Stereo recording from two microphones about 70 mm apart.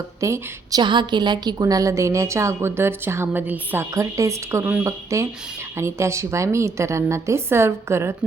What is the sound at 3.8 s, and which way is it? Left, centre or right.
A woman's voice, right.